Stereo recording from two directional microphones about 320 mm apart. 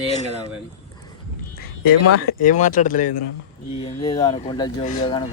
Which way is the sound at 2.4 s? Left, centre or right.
Left.